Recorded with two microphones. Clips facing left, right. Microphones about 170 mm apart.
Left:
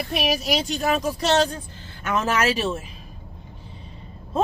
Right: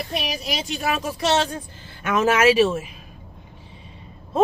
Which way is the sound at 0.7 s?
40° left (ahead or behind).